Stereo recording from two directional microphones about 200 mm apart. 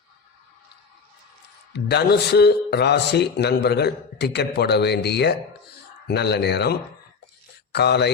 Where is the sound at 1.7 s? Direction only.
55° left (ahead or behind).